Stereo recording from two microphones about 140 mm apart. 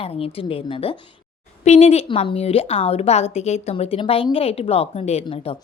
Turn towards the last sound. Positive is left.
turn(degrees=45)  # may be behind; listen again after turning